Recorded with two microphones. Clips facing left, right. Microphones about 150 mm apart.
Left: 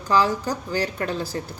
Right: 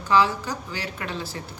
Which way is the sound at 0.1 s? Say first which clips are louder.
Left 1 dB; 40° left (ahead or behind).